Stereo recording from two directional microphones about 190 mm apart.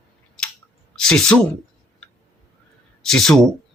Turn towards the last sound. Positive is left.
turn(degrees=0)  # may be behind; listen again after turning